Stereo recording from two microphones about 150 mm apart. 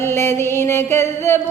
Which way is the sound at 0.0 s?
15° left (ahead or behind).